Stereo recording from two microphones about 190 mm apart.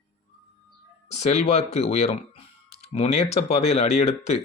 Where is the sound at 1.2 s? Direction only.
35° left (ahead or behind).